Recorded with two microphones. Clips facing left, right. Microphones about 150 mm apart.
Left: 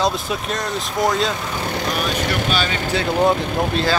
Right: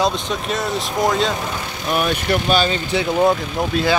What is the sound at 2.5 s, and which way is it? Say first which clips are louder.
Speech: right 4 dB; 35° right (ahead or behind).